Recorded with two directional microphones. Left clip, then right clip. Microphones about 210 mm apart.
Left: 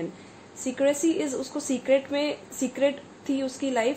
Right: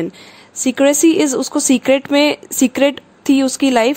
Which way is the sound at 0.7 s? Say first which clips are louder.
Right 12 dB; 50° right (ahead or behind).